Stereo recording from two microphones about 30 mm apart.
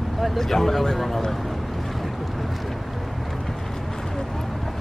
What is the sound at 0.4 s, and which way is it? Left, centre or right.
Speech, centre.